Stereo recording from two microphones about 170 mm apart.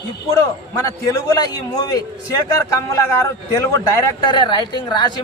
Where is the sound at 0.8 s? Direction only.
20° left (ahead or behind).